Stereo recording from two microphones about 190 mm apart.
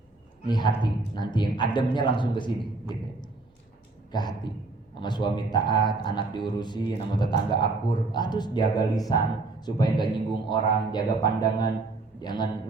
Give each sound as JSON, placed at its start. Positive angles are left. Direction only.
{"t": 0.4, "sound": "speech", "side_deg": 25}